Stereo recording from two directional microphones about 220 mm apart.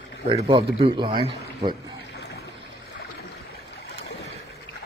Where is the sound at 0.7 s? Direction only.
20° right (ahead or behind).